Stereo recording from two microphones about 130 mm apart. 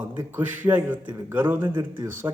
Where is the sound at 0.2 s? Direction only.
15° right (ahead or behind).